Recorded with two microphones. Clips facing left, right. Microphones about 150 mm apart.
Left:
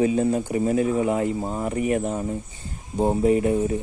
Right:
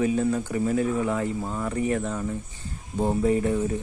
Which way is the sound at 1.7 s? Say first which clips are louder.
Left 3 dB; 15° left (ahead or behind).